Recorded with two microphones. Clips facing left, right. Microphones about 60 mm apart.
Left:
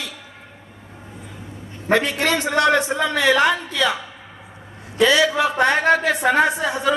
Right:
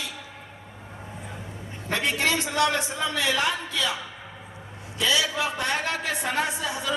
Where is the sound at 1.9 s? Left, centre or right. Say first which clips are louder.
Left 6 dB; left.